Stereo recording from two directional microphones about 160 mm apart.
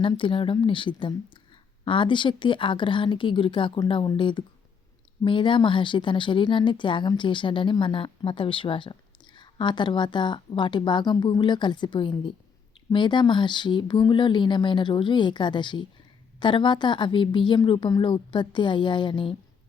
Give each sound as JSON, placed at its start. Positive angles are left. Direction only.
{"t": 0.0, "sound": "a woman's voice", "side_deg": 35}